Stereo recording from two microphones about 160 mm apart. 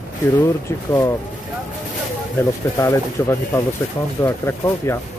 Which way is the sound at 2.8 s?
15° left (ahead or behind).